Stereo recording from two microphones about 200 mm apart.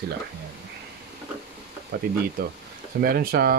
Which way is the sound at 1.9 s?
50° right (ahead or behind).